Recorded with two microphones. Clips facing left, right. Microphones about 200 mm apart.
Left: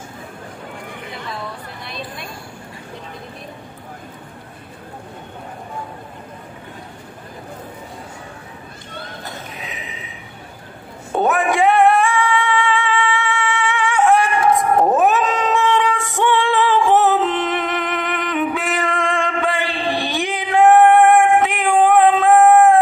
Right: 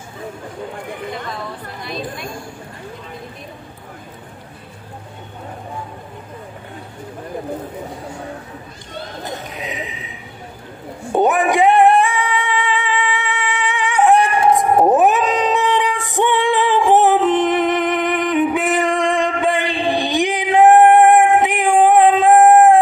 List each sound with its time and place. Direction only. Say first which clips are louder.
9.2 s a sound: right 5 dB; 15° right (ahead or behind)
11.1 s music: right 2 dB; 20° right (ahead or behind)
14.6 s dog: right 4 dB; 20° right (ahead or behind)